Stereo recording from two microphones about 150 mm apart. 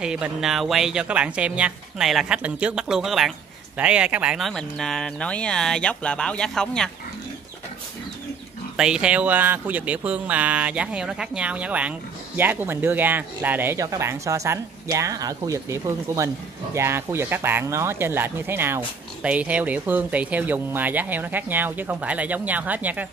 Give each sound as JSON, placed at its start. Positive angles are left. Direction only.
{"t": 0.0, "sound": "a woman's voice", "side_deg": -5}
{"t": 8.7, "sound": "speech", "side_deg": -5}